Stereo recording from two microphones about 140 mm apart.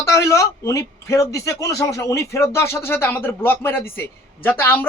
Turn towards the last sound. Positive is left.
turn(degrees=15)  # may be behind; listen again after turning